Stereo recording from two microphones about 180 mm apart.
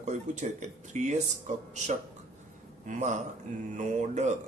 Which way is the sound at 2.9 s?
40° right (ahead or behind).